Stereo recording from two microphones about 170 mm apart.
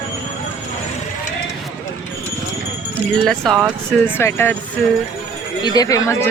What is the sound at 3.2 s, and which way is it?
Speech, centre (ahead or behind).